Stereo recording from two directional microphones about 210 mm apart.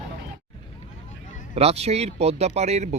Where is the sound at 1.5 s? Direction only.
30° right (ahead or behind).